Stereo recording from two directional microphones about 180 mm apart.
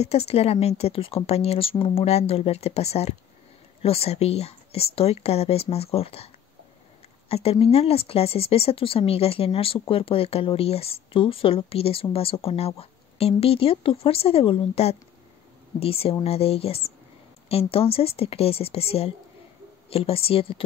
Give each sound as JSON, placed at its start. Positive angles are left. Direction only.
{"t": 0.0, "sound": "speech", "side_deg": 35}